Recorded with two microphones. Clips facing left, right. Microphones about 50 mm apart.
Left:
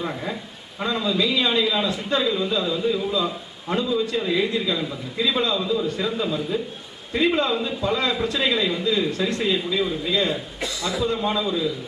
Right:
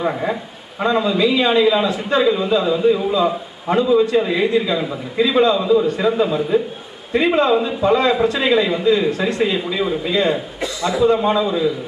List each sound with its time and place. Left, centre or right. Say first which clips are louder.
0.0 s a man's voice: right 8 dB; right